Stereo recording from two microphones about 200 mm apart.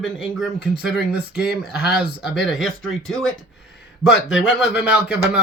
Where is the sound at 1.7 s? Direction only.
55° left (ahead or behind).